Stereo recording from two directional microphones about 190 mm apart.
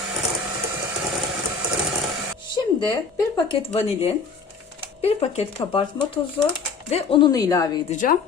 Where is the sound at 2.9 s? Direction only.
25° left (ahead or behind).